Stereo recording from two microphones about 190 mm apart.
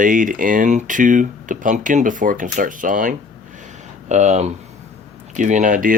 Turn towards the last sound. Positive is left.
turn(degrees=-45)  # may be behind; listen again after turning